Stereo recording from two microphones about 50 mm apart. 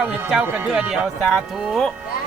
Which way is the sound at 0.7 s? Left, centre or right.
Centre.